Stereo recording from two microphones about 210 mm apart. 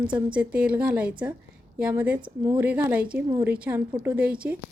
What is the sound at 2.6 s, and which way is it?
A woman's voice, 10° right (ahead or behind).